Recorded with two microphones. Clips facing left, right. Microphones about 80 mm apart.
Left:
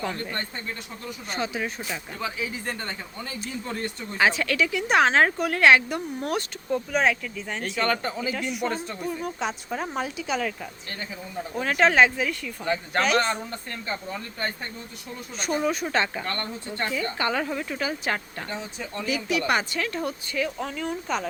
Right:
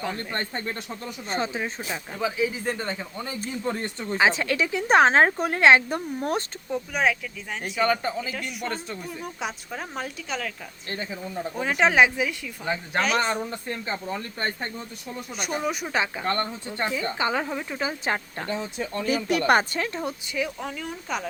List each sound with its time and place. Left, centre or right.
1.3 s speech: right
1.9 s speech: centre
4.2 s speech: right
6.7 s speech: centre
10.9 s speech: right
11.5 s speech: centre
13.5 s speech: centre
14.3 s speech: right
15.4 s speech: centre
16.2 s speech: right
18.8 s speech: right
20.1 s speech: centre
20.6 s speech: centre